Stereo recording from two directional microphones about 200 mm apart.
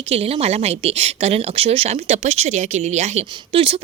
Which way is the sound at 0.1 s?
30° right (ahead or behind).